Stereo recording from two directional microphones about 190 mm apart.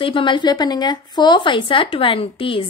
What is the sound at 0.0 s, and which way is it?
Speech, 25° left (ahead or behind).